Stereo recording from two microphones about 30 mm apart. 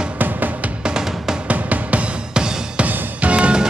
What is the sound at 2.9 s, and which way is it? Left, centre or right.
Music, right.